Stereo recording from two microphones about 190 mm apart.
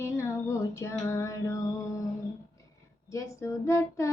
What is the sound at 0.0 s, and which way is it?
Female singing, 15° left (ahead or behind).